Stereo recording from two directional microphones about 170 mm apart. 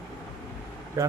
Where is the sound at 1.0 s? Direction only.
20° right (ahead or behind).